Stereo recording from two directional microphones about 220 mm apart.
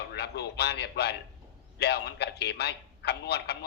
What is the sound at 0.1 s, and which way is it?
A man's voice, 50° left (ahead or behind).